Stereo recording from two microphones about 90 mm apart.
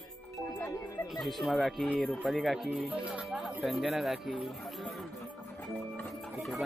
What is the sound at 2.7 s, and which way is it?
Music, 15° right (ahead or behind).